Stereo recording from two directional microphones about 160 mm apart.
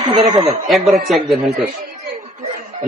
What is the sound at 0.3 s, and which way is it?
Speech, 25° right (ahead or behind).